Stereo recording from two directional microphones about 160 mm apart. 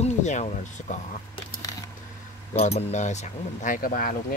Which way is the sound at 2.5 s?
45° left (ahead or behind).